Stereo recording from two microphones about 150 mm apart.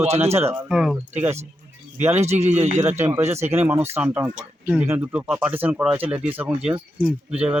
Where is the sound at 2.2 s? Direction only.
45° right (ahead or behind).